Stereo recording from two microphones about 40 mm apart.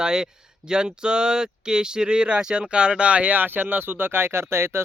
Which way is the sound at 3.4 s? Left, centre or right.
Right.